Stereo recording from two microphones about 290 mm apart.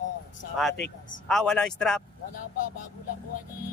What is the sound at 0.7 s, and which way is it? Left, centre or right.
Speech, left.